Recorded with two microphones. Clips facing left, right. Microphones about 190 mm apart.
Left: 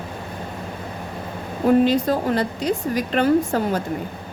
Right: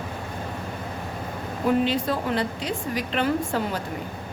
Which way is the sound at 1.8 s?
40° left (ahead or behind).